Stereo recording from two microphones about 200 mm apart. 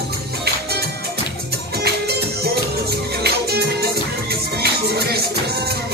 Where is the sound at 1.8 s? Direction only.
55° right (ahead or behind).